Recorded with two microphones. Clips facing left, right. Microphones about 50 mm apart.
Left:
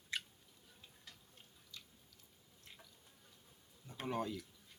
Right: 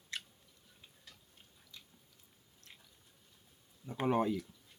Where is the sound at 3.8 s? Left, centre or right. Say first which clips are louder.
Right 9 dB; right.